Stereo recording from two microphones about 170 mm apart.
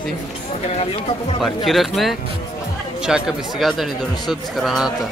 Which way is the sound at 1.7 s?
Centre (ahead or behind).